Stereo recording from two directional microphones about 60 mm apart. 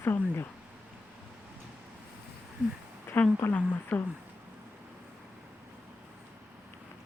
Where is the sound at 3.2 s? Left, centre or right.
Left.